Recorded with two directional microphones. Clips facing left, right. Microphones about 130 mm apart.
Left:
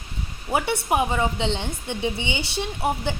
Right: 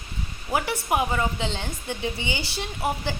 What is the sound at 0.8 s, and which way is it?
A woman's voice, 25° left (ahead or behind).